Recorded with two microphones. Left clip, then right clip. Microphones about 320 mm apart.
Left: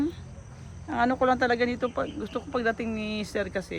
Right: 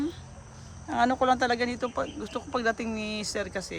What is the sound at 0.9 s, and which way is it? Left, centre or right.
Speech, centre.